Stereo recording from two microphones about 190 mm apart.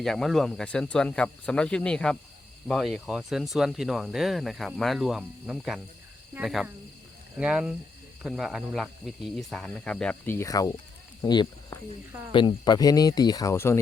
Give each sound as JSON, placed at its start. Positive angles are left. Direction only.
{"t": 0.0, "sound": "speech", "side_deg": 0}